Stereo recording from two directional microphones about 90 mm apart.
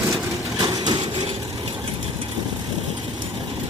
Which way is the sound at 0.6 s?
60° right (ahead or behind).